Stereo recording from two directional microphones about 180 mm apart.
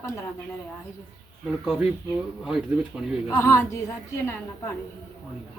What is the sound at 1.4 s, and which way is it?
Speech, centre (ahead or behind).